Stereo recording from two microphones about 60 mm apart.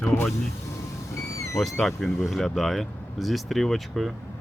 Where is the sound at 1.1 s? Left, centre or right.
Left.